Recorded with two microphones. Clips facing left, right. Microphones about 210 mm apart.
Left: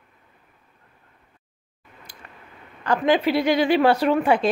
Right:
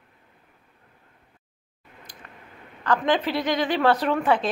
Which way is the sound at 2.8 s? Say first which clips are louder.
Left 3 dB; 10° left (ahead or behind).